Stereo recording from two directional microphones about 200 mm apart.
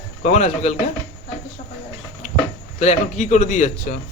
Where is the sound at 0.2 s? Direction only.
35° left (ahead or behind).